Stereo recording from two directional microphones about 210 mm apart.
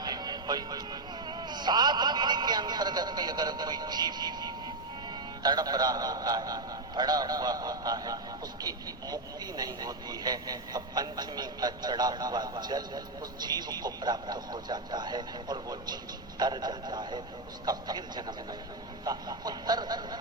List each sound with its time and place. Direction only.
0.0 s music: 20° right (ahead or behind)
1.3 s a man's voice: 20° right (ahead or behind)